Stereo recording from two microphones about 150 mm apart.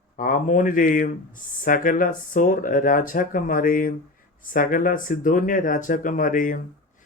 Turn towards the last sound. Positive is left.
turn(degrees=65)  # may be behind; listen again after turning